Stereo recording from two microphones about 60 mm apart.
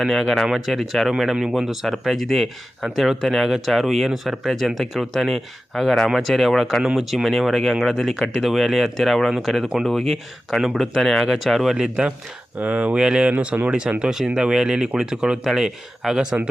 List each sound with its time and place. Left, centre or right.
0.0 s speech: centre
12.5 s speech: right
13.3 s speech: right
14.0 s speech: centre